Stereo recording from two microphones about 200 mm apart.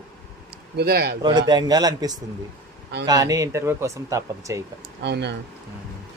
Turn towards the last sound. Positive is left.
turn(degrees=-55)  # may be behind; listen again after turning